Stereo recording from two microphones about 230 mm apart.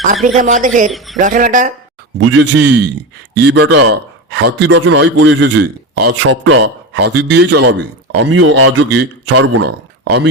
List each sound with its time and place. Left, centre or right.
0.3 s speech: right
0.9 s speech: centre
1.1 s speech: right
2.1 s a man's voice: right